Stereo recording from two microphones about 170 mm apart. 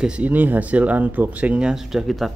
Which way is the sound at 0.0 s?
10° right (ahead or behind).